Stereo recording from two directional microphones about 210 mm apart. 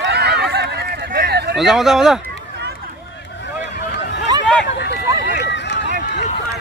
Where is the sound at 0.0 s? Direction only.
50° right (ahead or behind).